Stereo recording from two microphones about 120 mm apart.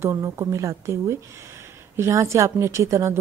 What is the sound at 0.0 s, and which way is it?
Speech, 25° right (ahead or behind).